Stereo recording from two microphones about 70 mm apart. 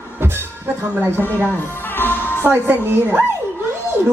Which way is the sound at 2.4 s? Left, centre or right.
Right.